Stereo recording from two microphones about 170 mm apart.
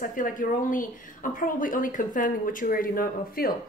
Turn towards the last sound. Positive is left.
turn(degrees=60)  # may be behind; listen again after turning